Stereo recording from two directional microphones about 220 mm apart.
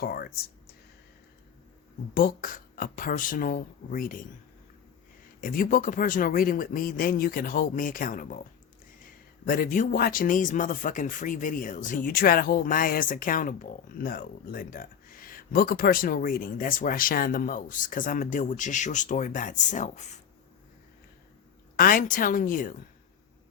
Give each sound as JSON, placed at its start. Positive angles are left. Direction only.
{"t": 0.0, "sound": "speech", "side_deg": 45}
{"t": 2.1, "sound": "speech", "side_deg": 40}
{"t": 5.4, "sound": "speech", "side_deg": 40}
{"t": 9.5, "sound": "speech", "side_deg": 35}
{"t": 21.8, "sound": "speech", "side_deg": 40}